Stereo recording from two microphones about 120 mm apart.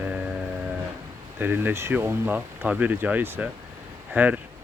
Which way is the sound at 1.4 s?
15° right (ahead or behind).